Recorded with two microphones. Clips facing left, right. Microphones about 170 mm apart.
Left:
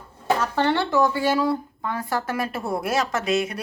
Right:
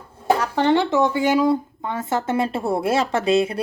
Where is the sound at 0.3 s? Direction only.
15° right (ahead or behind).